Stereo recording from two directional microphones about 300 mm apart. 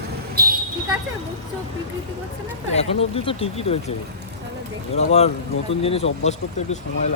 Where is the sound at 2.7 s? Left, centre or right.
Centre.